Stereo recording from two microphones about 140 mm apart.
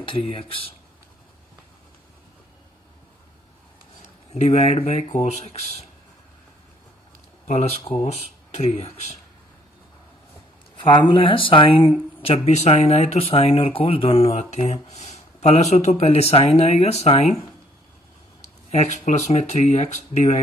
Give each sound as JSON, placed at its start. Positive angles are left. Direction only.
{"t": 0.0, "sound": "speech", "side_deg": 40}
{"t": 4.3, "sound": "speech", "side_deg": 50}
{"t": 7.4, "sound": "speech", "side_deg": 50}
{"t": 10.8, "sound": "speech", "side_deg": 35}
{"t": 18.4, "sound": "speech", "side_deg": 55}